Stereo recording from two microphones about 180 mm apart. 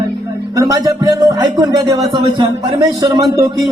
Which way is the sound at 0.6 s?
20° right (ahead or behind).